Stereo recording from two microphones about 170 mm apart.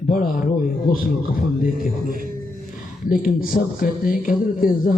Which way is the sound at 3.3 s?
55° left (ahead or behind).